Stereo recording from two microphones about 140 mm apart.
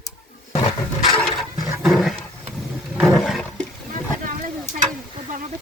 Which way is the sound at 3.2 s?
5° left (ahead or behind).